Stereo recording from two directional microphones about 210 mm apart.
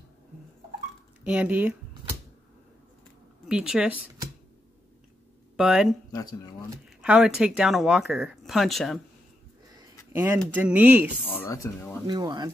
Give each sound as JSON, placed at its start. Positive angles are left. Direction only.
{"t": 1.2, "sound": "speech", "side_deg": -5}
{"t": 3.4, "sound": "speech", "side_deg": -5}
{"t": 5.6, "sound": "speech", "side_deg": -5}
{"t": 6.1, "sound": "speech", "side_deg": 15}
{"t": 7.0, "sound": "speech", "side_deg": -5}
{"t": 10.1, "sound": "speech", "side_deg": -10}
{"t": 11.2, "sound": "speech", "side_deg": 10}
{"t": 12.1, "sound": "speech", "side_deg": -20}